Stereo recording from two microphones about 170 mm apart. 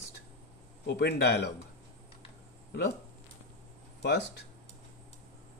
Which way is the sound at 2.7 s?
80° left.